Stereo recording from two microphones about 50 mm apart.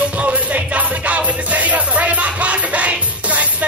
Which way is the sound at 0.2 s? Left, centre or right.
Right.